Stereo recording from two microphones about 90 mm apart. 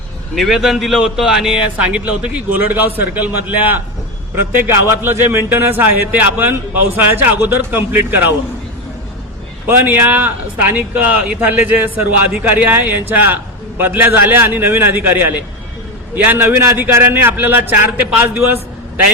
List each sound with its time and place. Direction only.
0.3 s a man's voice: centre (ahead or behind); by 8.3 s 20° right (ahead or behind)
9.6 s a man's voice: 25° right (ahead or behind)